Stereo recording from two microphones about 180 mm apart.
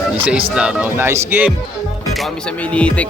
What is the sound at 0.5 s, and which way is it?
Speech, 5° right (ahead or behind).